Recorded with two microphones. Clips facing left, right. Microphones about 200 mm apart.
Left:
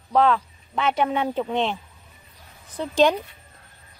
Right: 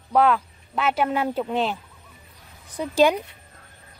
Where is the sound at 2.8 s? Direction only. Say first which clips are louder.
Even; 10° right (ahead or behind).